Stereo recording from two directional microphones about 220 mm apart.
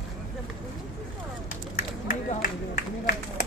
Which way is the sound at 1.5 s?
40° left (ahead or behind).